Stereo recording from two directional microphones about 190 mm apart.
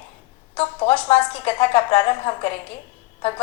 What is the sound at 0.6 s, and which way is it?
A woman's voice, 30° left (ahead or behind).